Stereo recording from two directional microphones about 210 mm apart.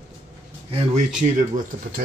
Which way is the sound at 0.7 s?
35° right (ahead or behind).